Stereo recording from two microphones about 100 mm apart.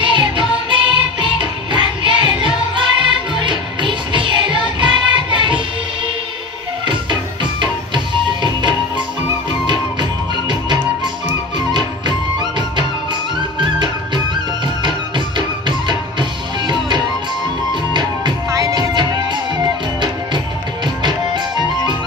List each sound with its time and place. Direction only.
0.0 s music: 55° right (ahead or behind)
7.6 s music: 50° right (ahead or behind)
18.5 s music: 35° right (ahead or behind)